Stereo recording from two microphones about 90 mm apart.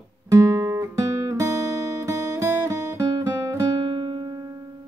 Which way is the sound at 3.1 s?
45° right (ahead or behind).